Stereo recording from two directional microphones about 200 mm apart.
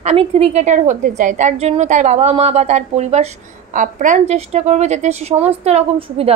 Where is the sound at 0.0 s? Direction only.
30° right (ahead or behind).